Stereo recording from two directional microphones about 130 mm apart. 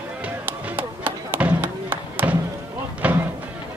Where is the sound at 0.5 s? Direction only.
15° right (ahead or behind).